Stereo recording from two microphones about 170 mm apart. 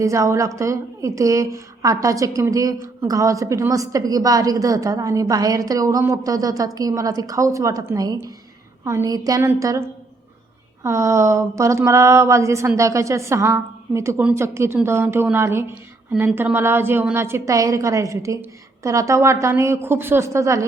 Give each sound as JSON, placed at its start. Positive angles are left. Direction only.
{"t": 0.0, "sound": "a woman's voice", "side_deg": -20}
{"t": 10.8, "sound": "speech", "side_deg": -15}